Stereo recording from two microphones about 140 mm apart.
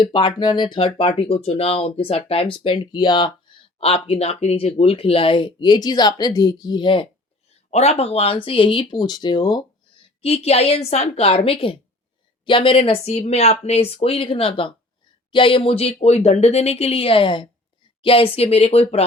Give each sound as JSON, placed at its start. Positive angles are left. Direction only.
{"t": 0.0, "sound": "speech", "side_deg": 35}
{"t": 3.8, "sound": "speech", "side_deg": 45}
{"t": 7.7, "sound": "speech", "side_deg": 50}
{"t": 10.2, "sound": "speech", "side_deg": 45}